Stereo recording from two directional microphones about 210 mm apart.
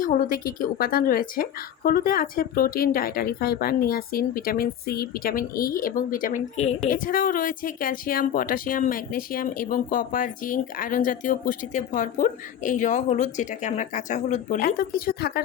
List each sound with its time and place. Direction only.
0.0 s speech: 40° left (ahead or behind)